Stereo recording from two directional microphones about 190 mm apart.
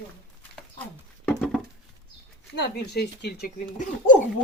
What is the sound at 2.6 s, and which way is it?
Speech, 60° left (ahead or behind).